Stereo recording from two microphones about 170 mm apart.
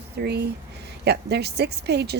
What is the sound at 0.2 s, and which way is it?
A woman's voice, 70° right (ahead or behind).